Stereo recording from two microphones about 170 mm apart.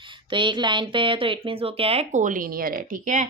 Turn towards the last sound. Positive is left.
turn(degrees=-50)  # may be behind; listen again after turning